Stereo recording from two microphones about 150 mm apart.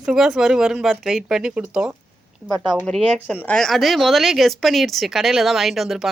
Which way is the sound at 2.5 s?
30° right (ahead or behind).